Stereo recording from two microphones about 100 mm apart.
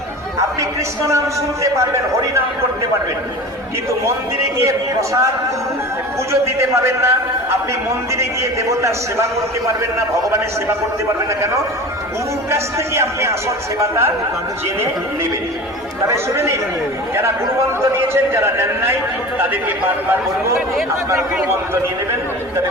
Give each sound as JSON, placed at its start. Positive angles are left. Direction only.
{"t": 1.0, "sound": "a man's voice", "side_deg": -30}
{"t": 4.5, "sound": "a man's voice", "side_deg": -30}
{"t": 6.3, "sound": "a man's voice", "side_deg": -30}
{"t": 12.5, "sound": "a man's voice", "side_deg": -25}
{"t": 16.0, "sound": "a man's voice", "side_deg": -25}